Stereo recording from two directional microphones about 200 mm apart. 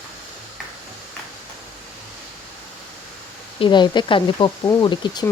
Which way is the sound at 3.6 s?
25° left (ahead or behind).